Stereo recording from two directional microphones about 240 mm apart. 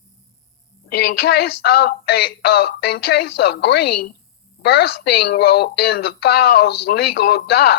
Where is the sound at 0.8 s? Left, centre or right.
Left.